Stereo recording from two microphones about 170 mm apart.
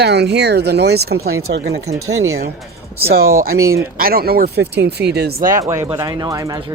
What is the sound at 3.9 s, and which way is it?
Speech, 60° right (ahead or behind).